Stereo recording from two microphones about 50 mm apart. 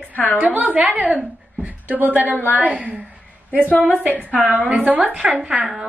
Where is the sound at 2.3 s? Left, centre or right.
Left.